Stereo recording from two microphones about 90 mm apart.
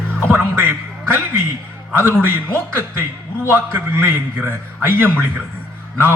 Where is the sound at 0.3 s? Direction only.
25° right (ahead or behind).